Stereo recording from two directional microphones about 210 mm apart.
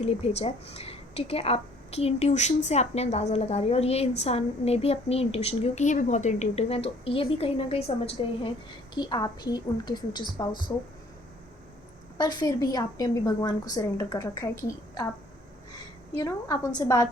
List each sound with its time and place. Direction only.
0.0 s a woman's voice: 30° left (ahead or behind)
12.1 s a woman's voice: 20° left (ahead or behind)
16.2 s a woman's voice: 15° left (ahead or behind)